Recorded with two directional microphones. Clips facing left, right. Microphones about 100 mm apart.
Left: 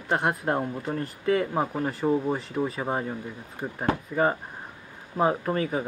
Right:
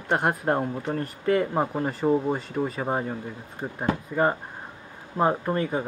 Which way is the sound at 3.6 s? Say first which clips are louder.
Even; 15° right (ahead or behind).